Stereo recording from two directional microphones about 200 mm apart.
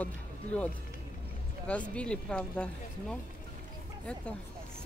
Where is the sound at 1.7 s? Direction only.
5° left (ahead or behind).